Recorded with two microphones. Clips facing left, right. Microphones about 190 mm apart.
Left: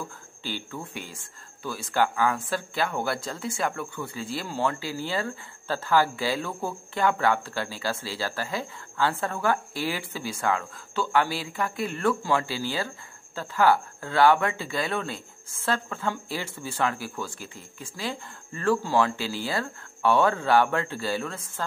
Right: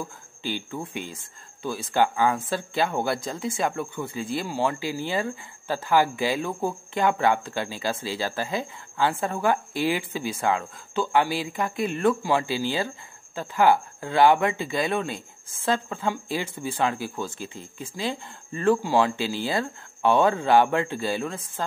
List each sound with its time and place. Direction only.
0.4 s a woman's voice: 15° right (ahead or behind)